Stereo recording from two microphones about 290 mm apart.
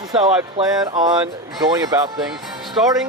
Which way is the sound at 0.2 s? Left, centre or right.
Centre.